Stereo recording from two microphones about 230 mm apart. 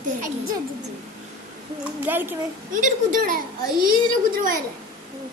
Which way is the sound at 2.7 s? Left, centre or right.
Right.